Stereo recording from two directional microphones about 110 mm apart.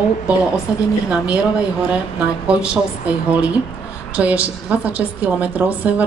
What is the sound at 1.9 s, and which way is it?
A woman's voice, 10° right (ahead or behind).